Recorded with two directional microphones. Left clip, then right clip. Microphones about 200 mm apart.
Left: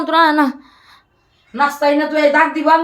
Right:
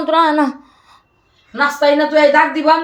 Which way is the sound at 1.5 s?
Centre (ahead or behind).